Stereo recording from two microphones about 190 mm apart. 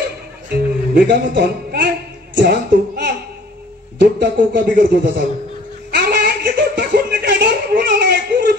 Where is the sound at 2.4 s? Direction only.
60° right (ahead or behind).